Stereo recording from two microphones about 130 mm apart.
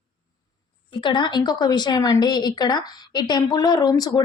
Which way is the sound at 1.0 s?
35° left (ahead or behind).